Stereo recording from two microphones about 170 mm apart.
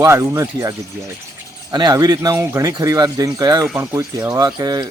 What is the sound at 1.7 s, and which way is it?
Speech, 25° right (ahead or behind).